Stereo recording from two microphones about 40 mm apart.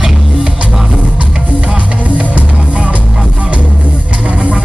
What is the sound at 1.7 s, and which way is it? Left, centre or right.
Music, right.